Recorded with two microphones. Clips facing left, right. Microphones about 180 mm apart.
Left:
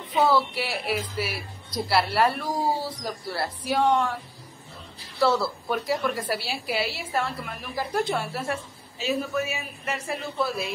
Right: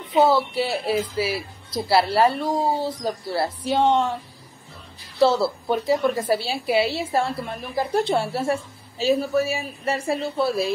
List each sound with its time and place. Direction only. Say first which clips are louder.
0.1 s a woman's voice: right 4 dB; 25° right (ahead or behind)
5.2 s a woman's voice: right 4 dB; 25° right (ahead or behind)